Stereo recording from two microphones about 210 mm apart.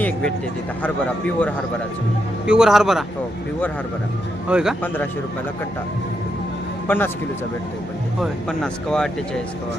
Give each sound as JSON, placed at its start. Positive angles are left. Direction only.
{"t": 0.0, "sound": "speech", "side_deg": 5}
{"t": 4.4, "sound": "speech", "side_deg": -5}
{"t": 6.8, "sound": "a man's voice", "side_deg": 10}
{"t": 8.2, "sound": "speech", "side_deg": 5}